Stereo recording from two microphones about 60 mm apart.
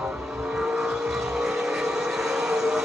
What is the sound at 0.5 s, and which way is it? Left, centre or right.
Vehicle, centre.